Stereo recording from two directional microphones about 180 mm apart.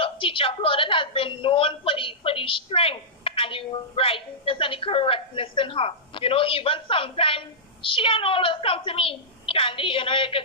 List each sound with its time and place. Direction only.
0.0 s a woman's voice: 30° left (ahead or behind)